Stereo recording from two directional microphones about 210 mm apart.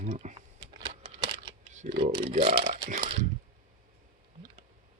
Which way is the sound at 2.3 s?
35° right (ahead or behind).